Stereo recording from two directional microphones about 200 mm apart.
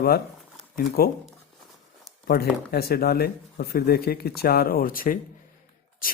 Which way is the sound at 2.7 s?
50° left (ahead or behind).